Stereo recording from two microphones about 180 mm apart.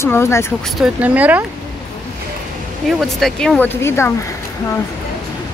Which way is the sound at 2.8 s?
Centre (ahead or behind).